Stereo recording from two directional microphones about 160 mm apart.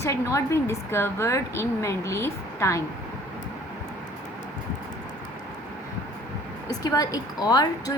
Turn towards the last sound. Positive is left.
turn(degrees=25)  # may be behind; listen again after turning